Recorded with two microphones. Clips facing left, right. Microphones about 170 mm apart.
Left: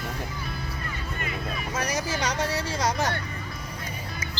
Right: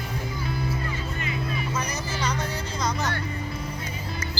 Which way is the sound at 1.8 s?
90° left.